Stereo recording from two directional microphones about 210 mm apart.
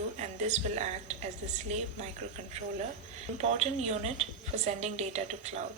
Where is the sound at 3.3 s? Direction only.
30° right (ahead or behind).